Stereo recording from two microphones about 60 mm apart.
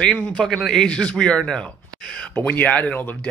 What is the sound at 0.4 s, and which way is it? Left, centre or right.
Speech, centre.